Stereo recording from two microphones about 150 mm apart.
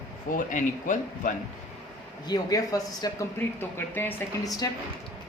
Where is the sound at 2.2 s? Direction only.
25° left (ahead or behind).